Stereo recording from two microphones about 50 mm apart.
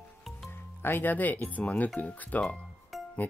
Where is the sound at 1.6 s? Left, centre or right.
Left.